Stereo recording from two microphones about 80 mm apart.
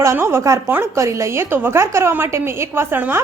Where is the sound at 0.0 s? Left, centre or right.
Right.